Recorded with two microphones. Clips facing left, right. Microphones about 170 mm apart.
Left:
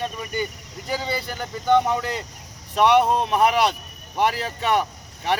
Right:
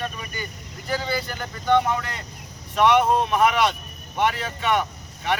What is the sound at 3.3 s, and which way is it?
Speech, 30° left (ahead or behind).